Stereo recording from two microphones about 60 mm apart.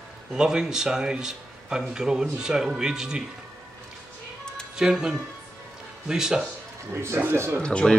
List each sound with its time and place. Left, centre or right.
0.3 s speech: centre
4.7 s speech: centre
6.9 s speech: right
7.6 s speech: centre